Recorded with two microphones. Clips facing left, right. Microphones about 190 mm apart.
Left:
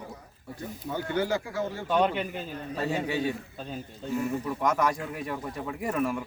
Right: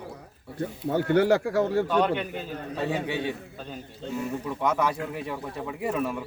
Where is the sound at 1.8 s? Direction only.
5° left (ahead or behind).